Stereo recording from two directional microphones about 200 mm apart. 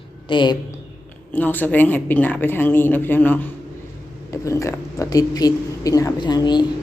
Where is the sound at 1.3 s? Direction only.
10° left (ahead or behind).